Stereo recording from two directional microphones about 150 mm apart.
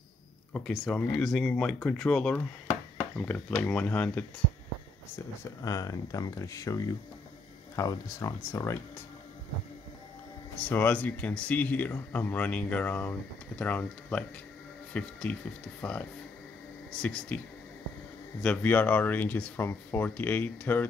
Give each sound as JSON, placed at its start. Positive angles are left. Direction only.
{"t": 0.5, "sound": "speech", "side_deg": 5}
{"t": 5.1, "sound": "speech", "side_deg": 20}
{"t": 10.7, "sound": "speech", "side_deg": 10}
{"t": 18.4, "sound": "speech", "side_deg": 10}